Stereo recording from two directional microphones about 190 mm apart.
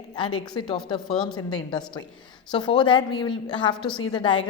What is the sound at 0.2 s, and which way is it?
A woman's voice, 25° left (ahead or behind).